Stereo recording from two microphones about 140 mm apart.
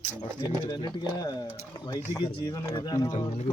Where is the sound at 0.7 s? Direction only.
35° left (ahead or behind).